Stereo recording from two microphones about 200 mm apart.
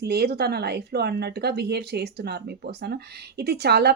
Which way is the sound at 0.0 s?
55° right (ahead or behind).